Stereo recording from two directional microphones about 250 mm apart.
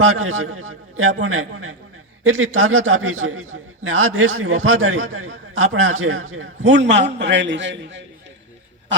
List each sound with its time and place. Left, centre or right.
0.0 s a man's voice: right